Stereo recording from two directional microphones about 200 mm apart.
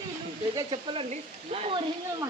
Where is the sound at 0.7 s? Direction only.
25° right (ahead or behind).